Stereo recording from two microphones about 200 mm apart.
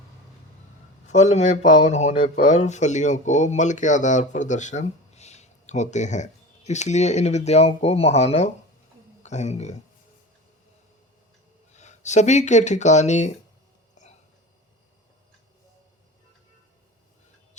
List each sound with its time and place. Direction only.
1.0 s speech: 35° left (ahead or behind)
11.7 s speech: 35° left (ahead or behind)
13.9 s hiccup: 35° left (ahead or behind)